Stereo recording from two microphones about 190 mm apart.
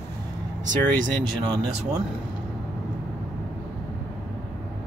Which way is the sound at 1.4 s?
25° right (ahead or behind).